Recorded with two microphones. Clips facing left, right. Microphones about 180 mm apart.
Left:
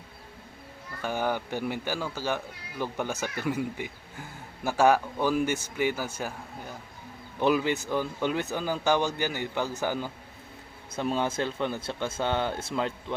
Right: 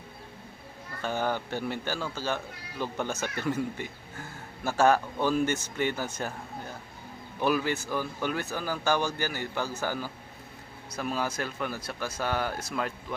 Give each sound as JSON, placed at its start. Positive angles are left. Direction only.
{"t": 1.0, "sound": "speech", "side_deg": 10}
{"t": 7.3, "sound": "speech", "side_deg": 20}